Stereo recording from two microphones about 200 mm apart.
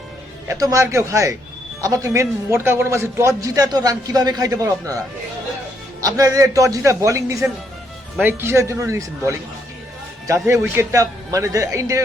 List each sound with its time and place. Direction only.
0.4 s a man's voice: 15° right (ahead or behind)